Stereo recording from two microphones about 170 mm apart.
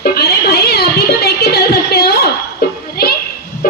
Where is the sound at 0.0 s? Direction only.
65° left (ahead or behind).